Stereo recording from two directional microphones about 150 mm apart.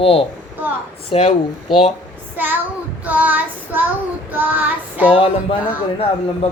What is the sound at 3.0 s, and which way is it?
Child singing, 10° right (ahead or behind).